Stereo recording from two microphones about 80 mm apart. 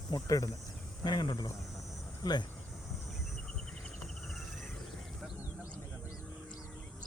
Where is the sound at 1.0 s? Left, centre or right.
Left.